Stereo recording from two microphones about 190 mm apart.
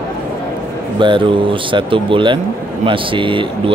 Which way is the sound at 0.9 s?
25° right (ahead or behind).